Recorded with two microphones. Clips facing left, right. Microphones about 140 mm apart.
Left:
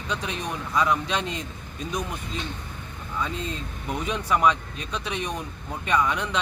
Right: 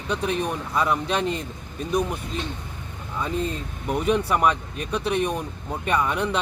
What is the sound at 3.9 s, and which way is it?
Speech, 10° right (ahead or behind).